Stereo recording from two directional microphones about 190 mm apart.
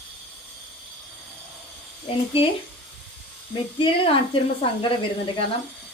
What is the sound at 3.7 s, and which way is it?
Speech, 25° left (ahead or behind).